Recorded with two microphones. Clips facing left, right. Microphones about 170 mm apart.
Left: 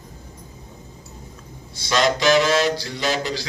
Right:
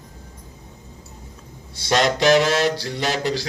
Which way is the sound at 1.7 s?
60° right (ahead or behind).